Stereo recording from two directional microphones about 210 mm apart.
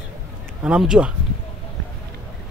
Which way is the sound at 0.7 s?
5° right (ahead or behind).